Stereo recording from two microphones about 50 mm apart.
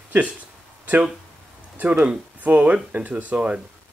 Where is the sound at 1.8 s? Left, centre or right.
Right.